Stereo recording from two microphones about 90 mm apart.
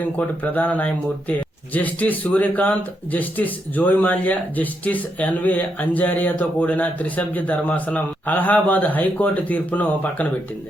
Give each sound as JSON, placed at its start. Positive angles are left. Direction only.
{"t": 0.0, "sound": "speech", "side_deg": 15}